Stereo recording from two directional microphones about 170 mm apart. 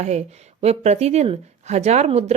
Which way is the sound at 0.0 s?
40° right (ahead or behind).